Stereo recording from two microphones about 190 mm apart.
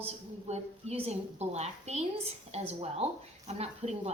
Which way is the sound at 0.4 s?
35° right (ahead or behind).